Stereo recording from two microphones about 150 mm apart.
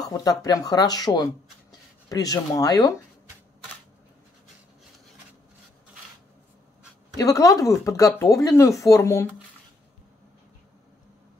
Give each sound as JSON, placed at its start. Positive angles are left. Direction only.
{"t": 0.0, "sound": "speech", "side_deg": 25}
{"t": 7.2, "sound": "speech", "side_deg": 20}